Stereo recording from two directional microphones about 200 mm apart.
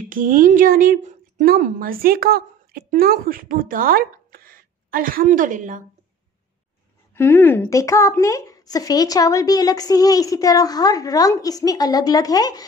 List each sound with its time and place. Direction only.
0.1 s a woman's voice: 40° right (ahead or behind)
7.2 s a woman's voice: 10° left (ahead or behind)